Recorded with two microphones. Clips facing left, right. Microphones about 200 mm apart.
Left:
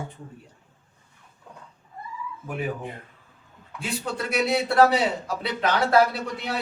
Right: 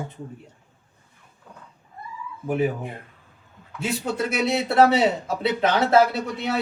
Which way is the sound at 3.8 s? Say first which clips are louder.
Right 4 dB; 25° right (ahead or behind).